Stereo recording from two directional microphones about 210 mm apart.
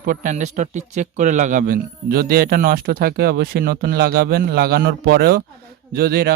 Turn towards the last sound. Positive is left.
turn(degrees=-45)  # may be behind; listen again after turning